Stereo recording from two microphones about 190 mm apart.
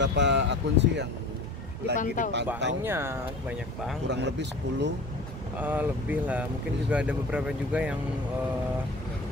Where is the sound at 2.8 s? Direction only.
10° right (ahead or behind).